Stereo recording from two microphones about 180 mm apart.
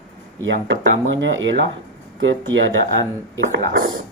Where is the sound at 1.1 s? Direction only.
90° right.